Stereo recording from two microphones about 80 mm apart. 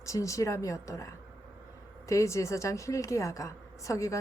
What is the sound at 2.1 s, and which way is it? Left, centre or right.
A woman's voice, left.